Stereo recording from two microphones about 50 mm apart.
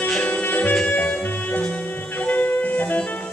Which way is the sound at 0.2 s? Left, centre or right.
Left.